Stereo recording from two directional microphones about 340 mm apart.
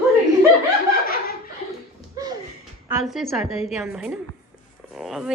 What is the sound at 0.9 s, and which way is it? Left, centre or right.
Laughter, left.